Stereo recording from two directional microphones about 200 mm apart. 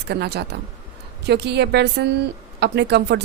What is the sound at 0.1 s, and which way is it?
Speech, 55° right (ahead or behind).